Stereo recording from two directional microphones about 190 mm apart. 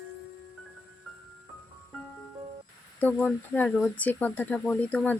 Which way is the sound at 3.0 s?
10° left (ahead or behind).